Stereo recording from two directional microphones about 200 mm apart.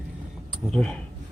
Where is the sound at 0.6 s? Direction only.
5° left (ahead or behind).